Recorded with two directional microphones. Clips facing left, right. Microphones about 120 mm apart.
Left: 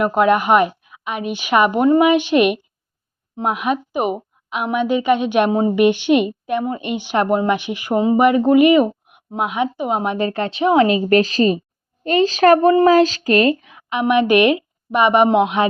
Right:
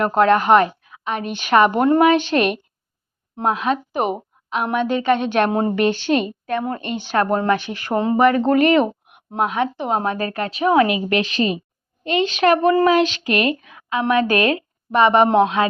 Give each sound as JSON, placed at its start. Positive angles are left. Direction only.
{"t": 0.0, "sound": "a woman's voice", "side_deg": 10}